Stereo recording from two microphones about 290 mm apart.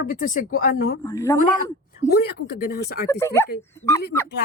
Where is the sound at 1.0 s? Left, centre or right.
Centre.